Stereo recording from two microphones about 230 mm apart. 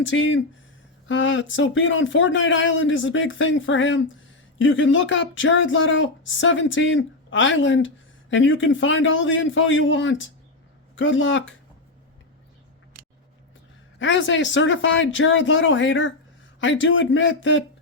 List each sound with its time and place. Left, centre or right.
0.0 s speech: left
14.0 s speech: left